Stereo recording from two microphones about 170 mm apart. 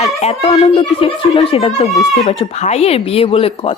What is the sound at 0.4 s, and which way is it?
Speech, 30° left (ahead or behind).